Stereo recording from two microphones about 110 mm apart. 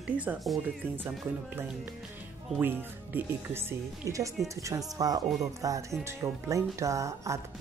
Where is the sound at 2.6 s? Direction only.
20° right (ahead or behind).